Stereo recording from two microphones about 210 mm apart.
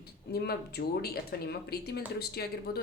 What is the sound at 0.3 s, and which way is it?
Speech, 50° left (ahead or behind).